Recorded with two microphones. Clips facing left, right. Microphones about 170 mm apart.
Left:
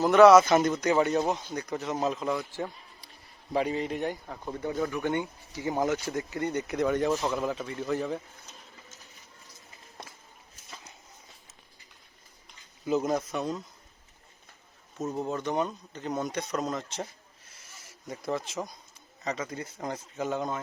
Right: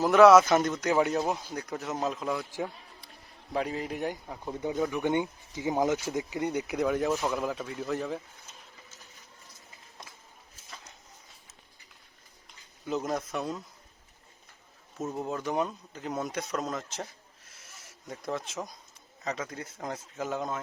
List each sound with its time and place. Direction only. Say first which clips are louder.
0.0 s speech: left 1 dB; centre (ahead or behind)
12.8 s speech: left 4 dB; centre (ahead or behind)
14.9 s a man's voice: left 2 dB; 5° right (ahead or behind)